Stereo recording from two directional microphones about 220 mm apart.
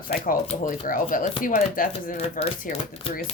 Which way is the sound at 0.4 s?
35° left (ahead or behind).